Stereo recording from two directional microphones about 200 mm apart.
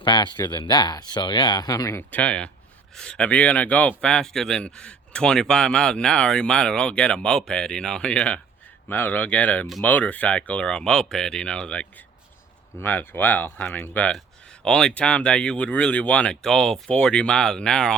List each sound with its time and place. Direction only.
0.0 s a man's voice: 20° left (ahead or behind); by 17.9 s 5° left (ahead or behind)